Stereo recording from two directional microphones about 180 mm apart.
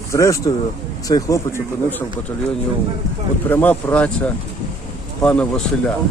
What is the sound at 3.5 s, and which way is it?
Speech, 10° left (ahead or behind).